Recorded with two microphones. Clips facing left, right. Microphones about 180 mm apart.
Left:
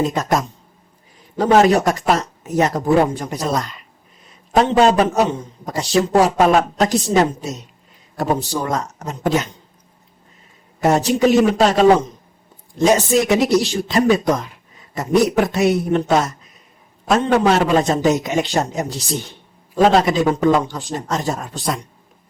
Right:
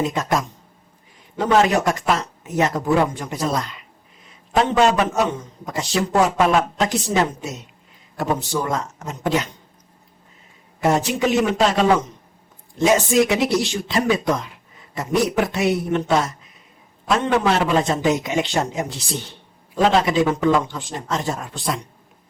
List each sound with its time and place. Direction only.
0.0 s a man's voice: 40° left (ahead or behind)
10.8 s a man's voice: 40° left (ahead or behind)